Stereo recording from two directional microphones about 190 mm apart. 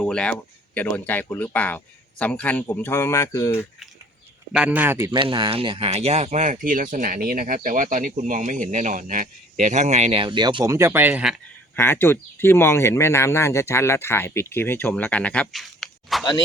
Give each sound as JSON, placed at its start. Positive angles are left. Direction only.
{"t": 0.0, "sound": "speech", "side_deg": 5}
{"t": 4.5, "sound": "a man's voice", "side_deg": -5}
{"t": 5.2, "sound": "speech", "side_deg": -25}
{"t": 11.8, "sound": "speech", "side_deg": 10}